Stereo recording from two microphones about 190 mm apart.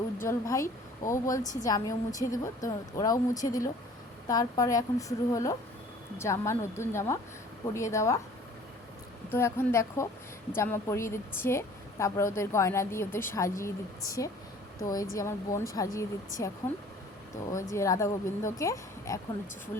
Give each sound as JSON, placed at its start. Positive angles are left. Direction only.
{"t": 0.3, "sound": "a woman's voice", "side_deg": 15}
{"t": 9.3, "sound": "a woman's voice", "side_deg": 15}
{"t": 17.5, "sound": "a woman's voice", "side_deg": 15}